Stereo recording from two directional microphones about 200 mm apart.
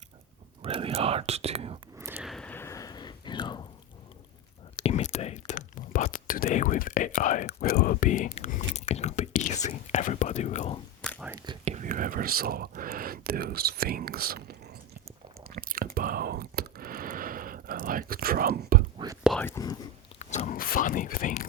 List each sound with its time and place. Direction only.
0.6 s speech: 30° right (ahead or behind)
2.0 s a sound: 10° right (ahead or behind)
2.2 s a sound: 5° left (ahead or behind); by 3.6 s 20° left (ahead or behind)
4.8 s speech: 35° left (ahead or behind)
11.6 s speech: 35° right (ahead or behind); by 14.8 s 50° right (ahead or behind)
15.5 s whispering: 45° right (ahead or behind)
18.9 s whispering: 15° right (ahead or behind)
19.2 s speech: 5° left (ahead or behind)
20.1 s speech: 35° left (ahead or behind)